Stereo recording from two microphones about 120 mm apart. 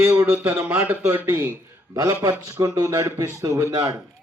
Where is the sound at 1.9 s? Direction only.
30° right (ahead or behind).